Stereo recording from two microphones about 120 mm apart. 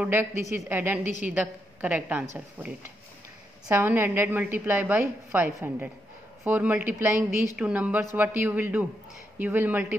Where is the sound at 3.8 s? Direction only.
15° right (ahead or behind).